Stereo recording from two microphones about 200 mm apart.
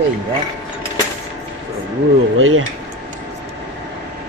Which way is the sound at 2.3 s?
90° right.